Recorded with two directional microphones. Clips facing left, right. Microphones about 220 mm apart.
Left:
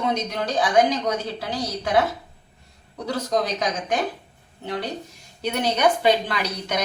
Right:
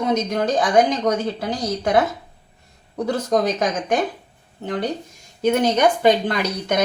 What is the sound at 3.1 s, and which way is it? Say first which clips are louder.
Speech: right 4 dB; 50° right (ahead or behind).